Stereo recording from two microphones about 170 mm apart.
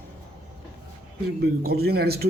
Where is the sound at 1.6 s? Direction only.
65° right (ahead or behind).